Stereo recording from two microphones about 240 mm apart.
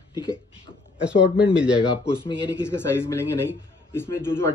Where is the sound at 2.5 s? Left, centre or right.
Centre.